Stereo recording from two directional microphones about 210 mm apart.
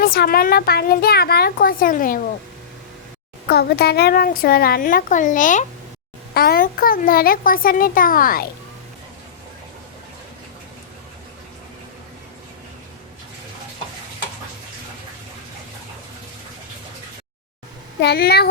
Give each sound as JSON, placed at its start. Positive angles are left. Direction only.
{"t": 0.0, "sound": "a child's voice", "side_deg": 45}
{"t": 3.5, "sound": "a child's voice", "side_deg": 50}
{"t": 18.0, "sound": "a child's voice", "side_deg": 50}